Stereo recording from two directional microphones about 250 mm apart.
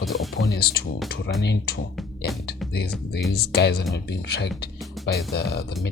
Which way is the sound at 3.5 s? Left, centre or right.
Left.